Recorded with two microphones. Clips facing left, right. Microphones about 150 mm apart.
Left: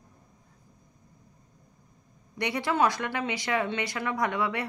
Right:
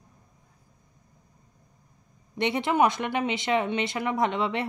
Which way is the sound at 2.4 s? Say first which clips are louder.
Right 3 dB; 20° right (ahead or behind).